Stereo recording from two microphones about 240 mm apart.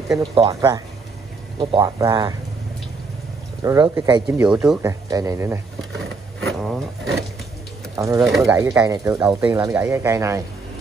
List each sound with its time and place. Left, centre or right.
0.2 s speech: right
3.6 s speech: centre
6.4 s bee: centre
7.9 s speech: centre
8.3 s speech: centre
8.5 s speech: centre